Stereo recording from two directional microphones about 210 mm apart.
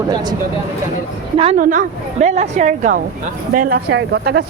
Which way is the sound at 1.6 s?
40° right (ahead or behind).